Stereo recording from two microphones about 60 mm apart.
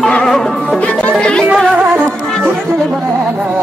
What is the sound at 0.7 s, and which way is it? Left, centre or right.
Music, left.